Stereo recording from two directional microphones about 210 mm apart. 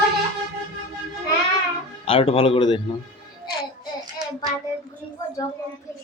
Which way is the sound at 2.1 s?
25° left (ahead or behind).